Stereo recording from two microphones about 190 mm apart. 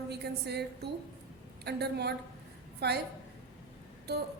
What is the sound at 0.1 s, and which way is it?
A woman's voice, 60° right (ahead or behind).